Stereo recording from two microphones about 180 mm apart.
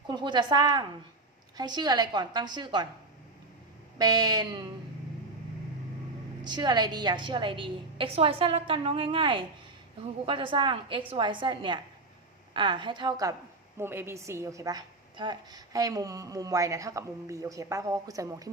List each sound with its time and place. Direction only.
0.1 s a woman's voice: 25° right (ahead or behind)
3.9 s a woman's voice: 20° right (ahead or behind)
6.4 s a woman's voice: 25° right (ahead or behind)